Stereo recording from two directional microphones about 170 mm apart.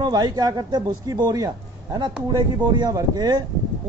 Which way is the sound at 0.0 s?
25° right (ahead or behind).